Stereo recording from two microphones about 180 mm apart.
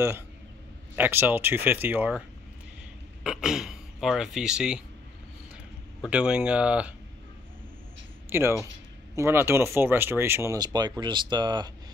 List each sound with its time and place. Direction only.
0.9 s speech: 10° right (ahead or behind)
3.3 s speech: 5° right (ahead or behind)
6.0 s speech: 5° right (ahead or behind)
8.3 s speech: 15° right (ahead or behind)